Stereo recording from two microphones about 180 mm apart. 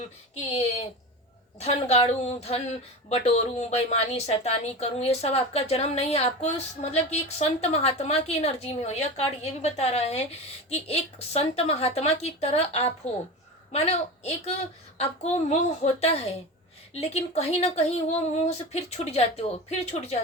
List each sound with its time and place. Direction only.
0.3 s a woman's voice: 35° left (ahead or behind)